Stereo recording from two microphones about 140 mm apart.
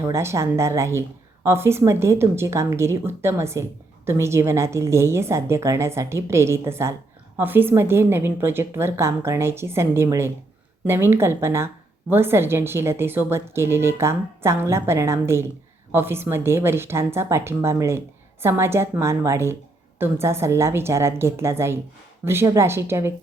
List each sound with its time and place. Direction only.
0.0 s a woman's voice: 20° right (ahead or behind)